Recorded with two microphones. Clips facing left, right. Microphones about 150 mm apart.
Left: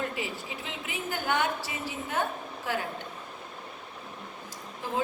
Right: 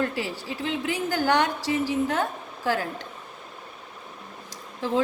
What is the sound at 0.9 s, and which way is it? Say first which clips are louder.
A woman's voice: right 7 dB; 90° right.